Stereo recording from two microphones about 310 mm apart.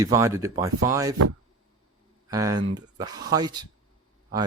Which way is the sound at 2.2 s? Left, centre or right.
Centre.